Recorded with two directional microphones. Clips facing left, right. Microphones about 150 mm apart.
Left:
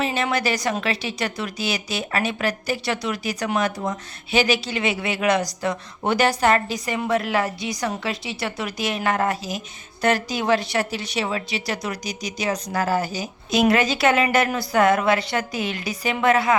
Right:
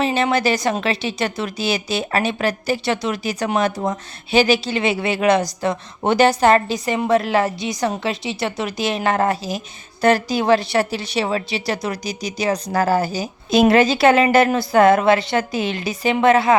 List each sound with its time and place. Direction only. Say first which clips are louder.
0.0 s a woman's voice: right 5 dB; 30° right (ahead or behind)